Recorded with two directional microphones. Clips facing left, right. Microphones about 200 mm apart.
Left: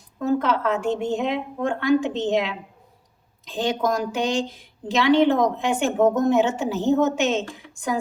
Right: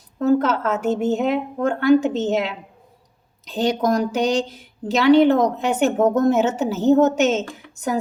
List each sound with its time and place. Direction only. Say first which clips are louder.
0.3 s speech: right 3 dB; 40° right (ahead or behind)